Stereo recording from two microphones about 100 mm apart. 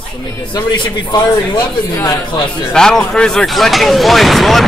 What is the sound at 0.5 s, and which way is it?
Speech, 45° left (ahead or behind).